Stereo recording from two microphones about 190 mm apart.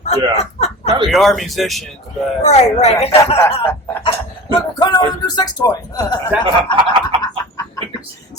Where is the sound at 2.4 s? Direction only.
35° left (ahead or behind).